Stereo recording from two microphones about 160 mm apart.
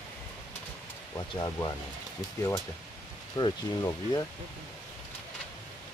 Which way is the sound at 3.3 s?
25° left (ahead or behind).